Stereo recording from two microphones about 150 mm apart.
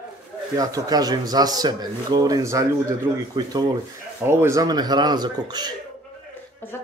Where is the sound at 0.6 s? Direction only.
25° right (ahead or behind).